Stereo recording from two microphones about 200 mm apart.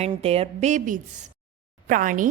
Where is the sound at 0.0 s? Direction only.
30° right (ahead or behind).